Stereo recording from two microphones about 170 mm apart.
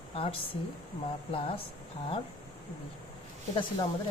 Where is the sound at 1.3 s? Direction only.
30° left (ahead or behind).